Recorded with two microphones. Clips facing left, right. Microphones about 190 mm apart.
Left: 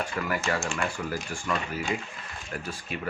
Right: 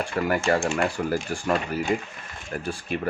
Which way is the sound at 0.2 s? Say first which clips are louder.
Right 8 dB; 40° right (ahead or behind).